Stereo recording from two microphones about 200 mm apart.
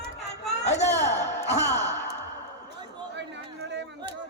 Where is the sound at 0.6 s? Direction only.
35° left (ahead or behind).